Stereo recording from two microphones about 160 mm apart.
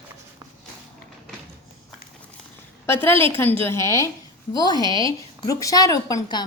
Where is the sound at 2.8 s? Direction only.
15° left (ahead or behind).